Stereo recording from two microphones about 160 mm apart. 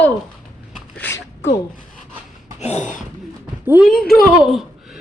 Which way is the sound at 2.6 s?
45° left (ahead or behind).